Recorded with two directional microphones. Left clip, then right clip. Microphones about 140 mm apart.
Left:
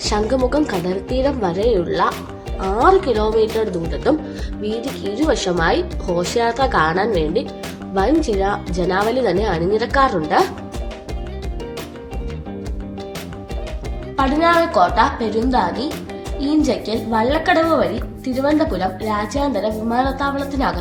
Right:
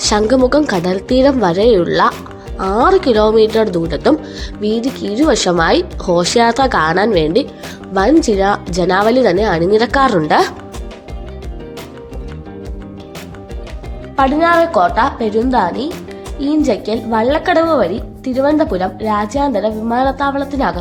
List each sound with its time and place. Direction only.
0.0 s a woman's voice: 45° right (ahead or behind)
14.2 s a woman's voice: 85° right